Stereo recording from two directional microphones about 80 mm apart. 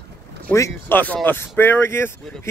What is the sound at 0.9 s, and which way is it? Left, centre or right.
Speech, left.